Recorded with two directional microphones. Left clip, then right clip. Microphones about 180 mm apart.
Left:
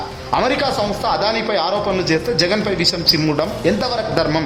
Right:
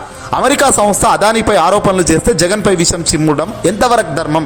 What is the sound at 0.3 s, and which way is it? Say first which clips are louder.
Speech: right 7 dB; 35° right (ahead or behind).